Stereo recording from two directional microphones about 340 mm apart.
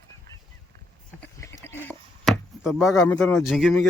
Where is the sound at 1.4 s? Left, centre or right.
Centre.